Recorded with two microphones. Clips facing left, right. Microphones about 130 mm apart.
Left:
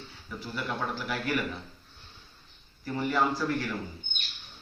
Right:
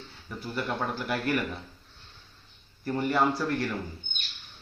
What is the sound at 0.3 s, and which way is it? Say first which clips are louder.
Speech: right 2 dB; 50° right (ahead or behind).